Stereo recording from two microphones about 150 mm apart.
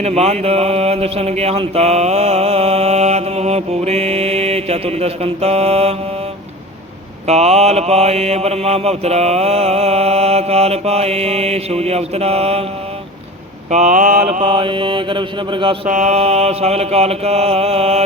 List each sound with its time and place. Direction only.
0.0 s speech: 45° right (ahead or behind)
7.3 s speech: 45° right (ahead or behind)
13.7 s mantra: 55° right (ahead or behind)
14.3 s mantra: 40° right (ahead or behind)
15.9 s speech: 55° right (ahead or behind)